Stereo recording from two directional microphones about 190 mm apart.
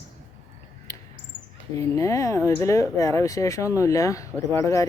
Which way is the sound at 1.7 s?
15° left (ahead or behind).